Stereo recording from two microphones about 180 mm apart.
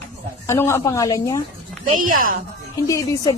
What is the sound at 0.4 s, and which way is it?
Speech, 15° left (ahead or behind).